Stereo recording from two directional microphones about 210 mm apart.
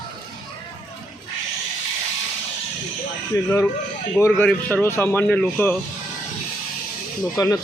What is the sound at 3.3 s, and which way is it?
Speech, 15° left (ahead or behind).